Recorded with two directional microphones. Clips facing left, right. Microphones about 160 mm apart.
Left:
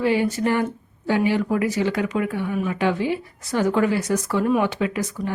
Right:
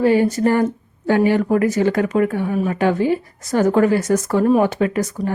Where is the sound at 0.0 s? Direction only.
45° right (ahead or behind).